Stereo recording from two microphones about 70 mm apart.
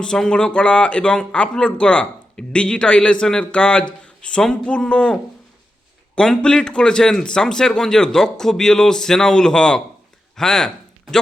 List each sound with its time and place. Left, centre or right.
0.0 s a man's voice: centre